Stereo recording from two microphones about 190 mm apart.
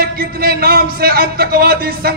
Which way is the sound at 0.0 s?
55° right (ahead or behind).